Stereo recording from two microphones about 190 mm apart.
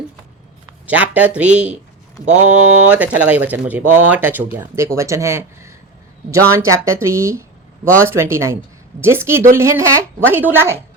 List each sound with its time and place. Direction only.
0.9 s speech: 10° right (ahead or behind)